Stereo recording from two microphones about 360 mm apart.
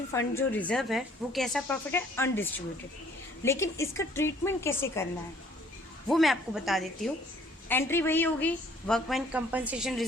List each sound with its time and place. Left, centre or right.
0.1 s a woman's voice: centre
6.1 s a woman's voice: centre